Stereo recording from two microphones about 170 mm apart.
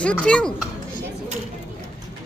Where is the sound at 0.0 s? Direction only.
5° left (ahead or behind).